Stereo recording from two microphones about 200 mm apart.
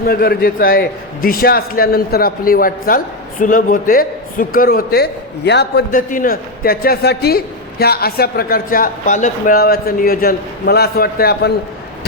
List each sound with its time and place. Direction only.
0.0 s a man's voice: 50° left (ahead or behind)